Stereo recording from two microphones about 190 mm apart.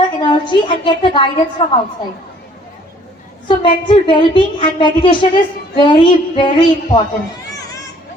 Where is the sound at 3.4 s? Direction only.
25° left (ahead or behind).